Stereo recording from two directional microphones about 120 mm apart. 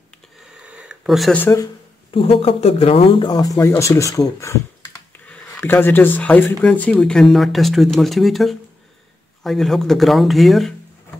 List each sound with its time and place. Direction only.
0.6 s a sound: 5° right (ahead or behind)
1.3 s speech: 15° left (ahead or behind)
2.0 s speech: 55° left (ahead or behind); by 10.7 s centre (ahead or behind)